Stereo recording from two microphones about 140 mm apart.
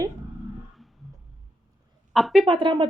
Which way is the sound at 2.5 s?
35° right (ahead or behind).